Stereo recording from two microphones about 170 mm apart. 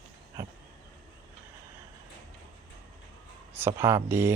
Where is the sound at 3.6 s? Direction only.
15° right (ahead or behind).